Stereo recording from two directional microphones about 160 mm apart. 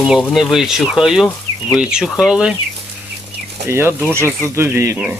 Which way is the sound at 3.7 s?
15° right (ahead or behind).